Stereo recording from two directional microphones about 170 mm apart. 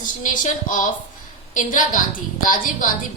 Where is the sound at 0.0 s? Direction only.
50° left (ahead or behind).